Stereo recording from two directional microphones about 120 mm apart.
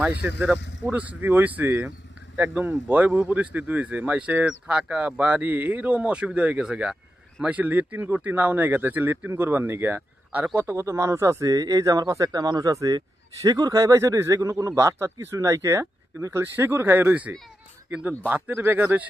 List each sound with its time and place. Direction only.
0.0 s speech: 10° right (ahead or behind)